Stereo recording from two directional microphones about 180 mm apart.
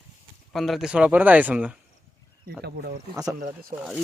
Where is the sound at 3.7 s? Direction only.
50° right (ahead or behind).